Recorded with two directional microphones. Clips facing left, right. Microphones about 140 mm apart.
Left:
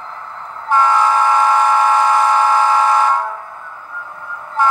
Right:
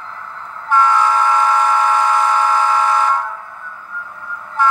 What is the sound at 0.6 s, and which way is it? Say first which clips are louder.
Train: left 1 dB; 30° left (ahead or behind).